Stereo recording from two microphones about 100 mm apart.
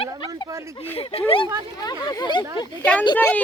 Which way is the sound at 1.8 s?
40° left (ahead or behind).